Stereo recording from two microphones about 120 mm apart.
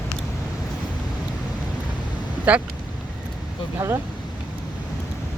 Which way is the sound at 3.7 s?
20° right (ahead or behind).